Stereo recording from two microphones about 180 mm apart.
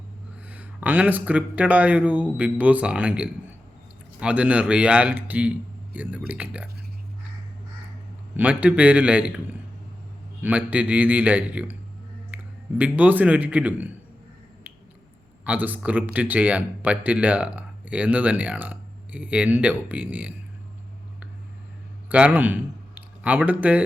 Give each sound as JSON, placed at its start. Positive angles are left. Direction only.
{"t": 0.4, "sound": "speech", "side_deg": -10}
{"t": 8.4, "sound": "speech", "side_deg": -10}
{"t": 10.4, "sound": "speech", "side_deg": -10}
{"t": 15.4, "sound": "speech", "side_deg": -10}
{"t": 22.1, "sound": "speech", "side_deg": -10}